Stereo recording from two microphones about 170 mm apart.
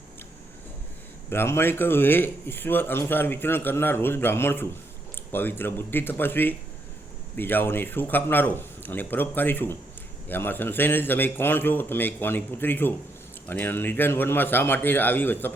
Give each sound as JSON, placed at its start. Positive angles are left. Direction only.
{"t": 1.3, "sound": "a man's voice", "side_deg": 15}